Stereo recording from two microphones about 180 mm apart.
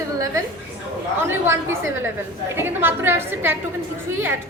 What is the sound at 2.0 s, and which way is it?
A woman's voice, 15° right (ahead or behind).